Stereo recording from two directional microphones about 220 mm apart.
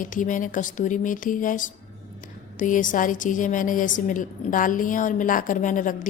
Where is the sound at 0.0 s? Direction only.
35° left (ahead or behind).